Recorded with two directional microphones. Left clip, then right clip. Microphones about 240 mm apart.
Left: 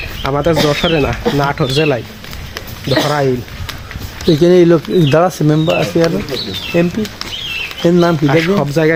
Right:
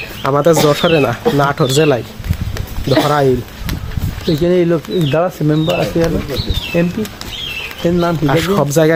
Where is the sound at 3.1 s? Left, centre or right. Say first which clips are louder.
Right 2 dB; centre.